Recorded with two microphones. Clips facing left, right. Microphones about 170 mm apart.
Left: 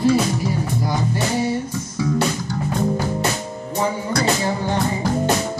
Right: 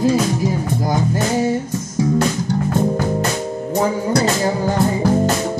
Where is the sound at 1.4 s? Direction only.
45° right (ahead or behind).